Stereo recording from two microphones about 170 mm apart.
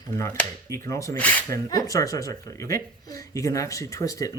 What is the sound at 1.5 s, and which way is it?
Speech, 20° left (ahead or behind).